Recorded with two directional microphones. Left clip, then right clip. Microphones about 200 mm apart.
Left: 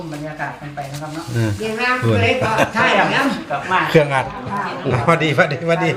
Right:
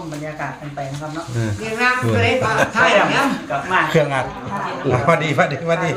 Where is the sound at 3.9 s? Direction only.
40° left (ahead or behind).